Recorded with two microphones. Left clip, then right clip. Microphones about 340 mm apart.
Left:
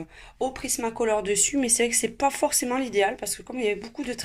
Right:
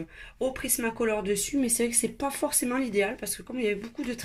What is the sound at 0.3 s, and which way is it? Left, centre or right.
Speech, centre.